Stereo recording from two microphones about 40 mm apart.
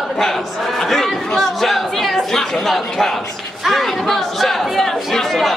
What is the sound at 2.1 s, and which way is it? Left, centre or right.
A man's voice, centre.